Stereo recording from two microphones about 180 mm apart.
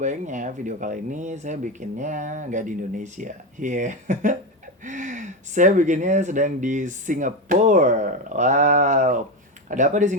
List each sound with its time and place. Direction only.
0.0 s speech: 45° right (ahead or behind)